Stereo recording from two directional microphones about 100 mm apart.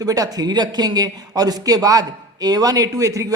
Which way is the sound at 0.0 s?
40° right (ahead or behind).